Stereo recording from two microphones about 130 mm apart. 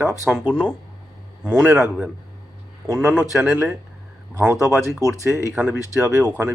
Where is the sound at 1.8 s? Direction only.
5° right (ahead or behind).